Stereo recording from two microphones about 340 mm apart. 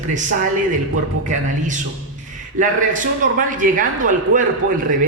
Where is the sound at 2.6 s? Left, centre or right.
Right.